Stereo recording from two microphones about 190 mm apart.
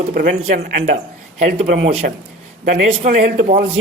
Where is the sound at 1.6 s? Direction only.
45° right (ahead or behind).